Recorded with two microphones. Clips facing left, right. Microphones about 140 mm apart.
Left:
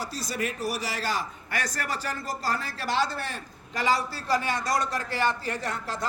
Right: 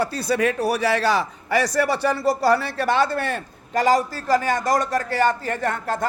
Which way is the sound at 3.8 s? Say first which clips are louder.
Right 7 dB; 45° right (ahead or behind).